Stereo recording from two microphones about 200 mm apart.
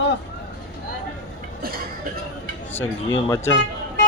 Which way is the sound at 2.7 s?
15° left (ahead or behind).